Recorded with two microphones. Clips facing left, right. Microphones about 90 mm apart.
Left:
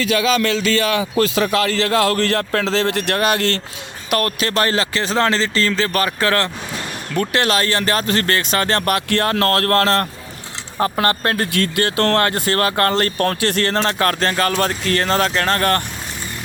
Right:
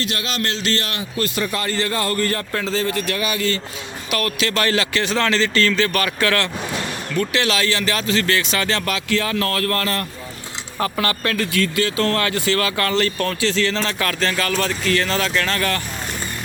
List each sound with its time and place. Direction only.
1.1 s a man's voice: 90° left; by 3.6 s 65° left (ahead or behind)
4.1 s speech: 45° left (ahead or behind); by 10.1 s 70° left (ahead or behind)
10.8 s speech: 45° left (ahead or behind)
11.5 s speech: 65° left (ahead or behind); by 15.8 s 45° left (ahead or behind)